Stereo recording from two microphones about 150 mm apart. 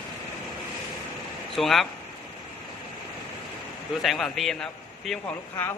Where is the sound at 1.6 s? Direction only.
Centre (ahead or behind).